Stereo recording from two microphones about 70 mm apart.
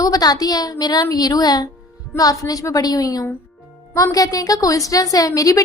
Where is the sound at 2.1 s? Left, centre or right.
Left.